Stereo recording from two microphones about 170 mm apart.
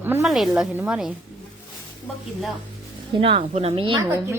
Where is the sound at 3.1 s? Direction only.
35° right (ahead or behind).